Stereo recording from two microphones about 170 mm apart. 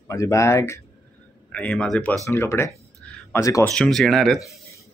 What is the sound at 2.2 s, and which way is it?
Speech, 15° left (ahead or behind).